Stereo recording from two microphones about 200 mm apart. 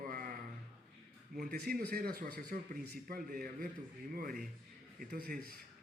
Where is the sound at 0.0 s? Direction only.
45° right (ahead or behind).